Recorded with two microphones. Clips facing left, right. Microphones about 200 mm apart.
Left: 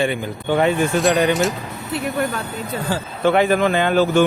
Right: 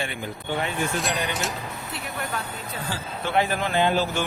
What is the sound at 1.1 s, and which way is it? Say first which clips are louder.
Speech: left 11 dB; 90° left.